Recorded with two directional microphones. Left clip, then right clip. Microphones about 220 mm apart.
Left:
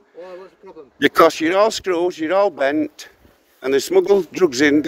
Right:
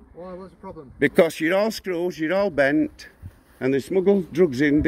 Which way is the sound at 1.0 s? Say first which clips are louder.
Left 5 dB; 40° left (ahead or behind).